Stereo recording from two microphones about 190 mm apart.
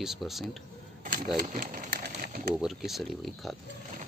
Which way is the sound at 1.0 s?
45° right (ahead or behind).